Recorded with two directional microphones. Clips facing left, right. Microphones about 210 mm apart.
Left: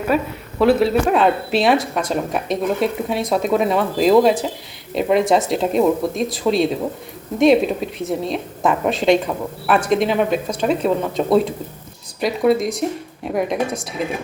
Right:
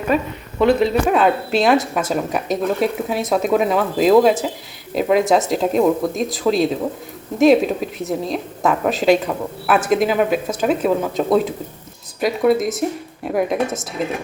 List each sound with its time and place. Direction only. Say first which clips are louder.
0.1 s a woman's voice: right 1 dB; 5° left (ahead or behind)